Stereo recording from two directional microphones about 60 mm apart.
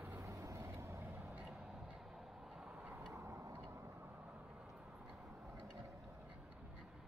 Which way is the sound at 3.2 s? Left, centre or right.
Right.